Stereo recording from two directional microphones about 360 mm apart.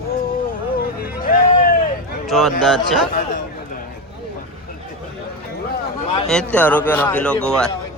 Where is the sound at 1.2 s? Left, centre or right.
Left.